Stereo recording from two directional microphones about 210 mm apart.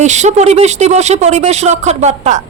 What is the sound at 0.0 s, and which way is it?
A woman's voice, 35° right (ahead or behind).